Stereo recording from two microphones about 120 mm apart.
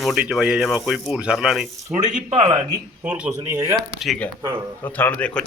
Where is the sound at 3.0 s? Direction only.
10° right (ahead or behind).